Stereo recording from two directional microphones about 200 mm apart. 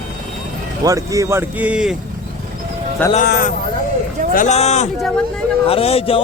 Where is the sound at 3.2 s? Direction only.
50° left (ahead or behind).